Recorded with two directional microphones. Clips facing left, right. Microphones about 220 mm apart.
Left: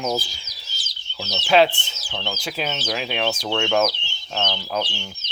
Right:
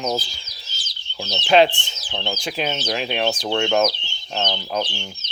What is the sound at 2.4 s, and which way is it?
Speech, 5° left (ahead or behind).